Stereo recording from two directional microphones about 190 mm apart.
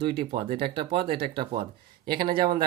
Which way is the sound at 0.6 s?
30° right (ahead or behind).